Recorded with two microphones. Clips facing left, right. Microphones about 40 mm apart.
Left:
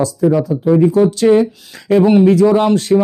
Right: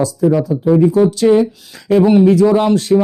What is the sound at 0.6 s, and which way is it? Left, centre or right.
Speech, left.